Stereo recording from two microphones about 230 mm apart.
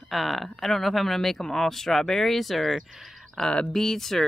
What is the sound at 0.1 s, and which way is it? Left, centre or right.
Speech, centre.